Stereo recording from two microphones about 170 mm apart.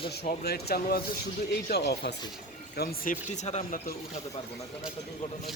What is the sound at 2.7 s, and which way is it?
Speech, 60° left (ahead or behind).